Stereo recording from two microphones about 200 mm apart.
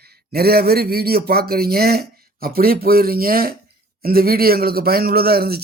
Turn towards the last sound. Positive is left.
turn(degrees=-50)  # may be behind; listen again after turning